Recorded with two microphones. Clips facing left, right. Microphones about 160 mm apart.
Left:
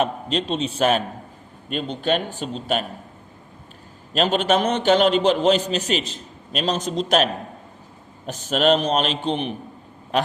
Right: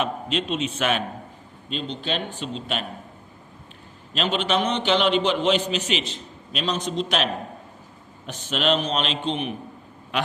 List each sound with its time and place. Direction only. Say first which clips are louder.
0.0 s a man's voice: left 3 dB; 35° left (ahead or behind)
1.7 s speech: left 6 dB; 50° left (ahead or behind)
4.1 s a man's voice: left 4 dB; 45° left (ahead or behind)
8.3 s a man's voice: left 5 dB; 40° left (ahead or behind)